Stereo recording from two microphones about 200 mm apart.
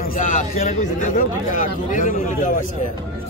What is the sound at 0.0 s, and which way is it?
Speech, 40° left (ahead or behind).